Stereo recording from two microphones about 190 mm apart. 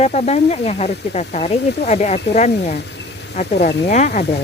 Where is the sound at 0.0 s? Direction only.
35° left (ahead or behind).